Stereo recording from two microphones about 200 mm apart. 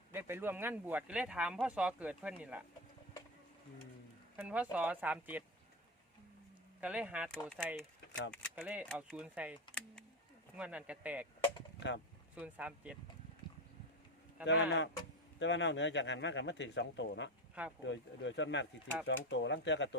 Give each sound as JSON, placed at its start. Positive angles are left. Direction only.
{"t": 0.1, "sound": "speech", "side_deg": -10}
{"t": 4.4, "sound": "speech", "side_deg": -5}
{"t": 6.8, "sound": "speech", "side_deg": -5}
{"t": 8.5, "sound": "speech", "side_deg": -10}
{"t": 8.9, "sound": "speech", "side_deg": 5}
{"t": 10.6, "sound": "speech", "side_deg": -5}
{"t": 11.8, "sound": "speech", "side_deg": 60}
{"t": 12.4, "sound": "speech", "side_deg": -5}
{"t": 14.4, "sound": "speech", "side_deg": 60}